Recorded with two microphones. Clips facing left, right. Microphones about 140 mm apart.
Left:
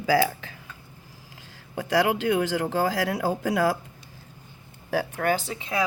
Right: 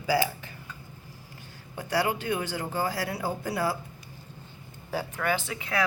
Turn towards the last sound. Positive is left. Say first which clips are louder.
# left 1 dB
turn(degrees=20)  # may be behind; listen again after turning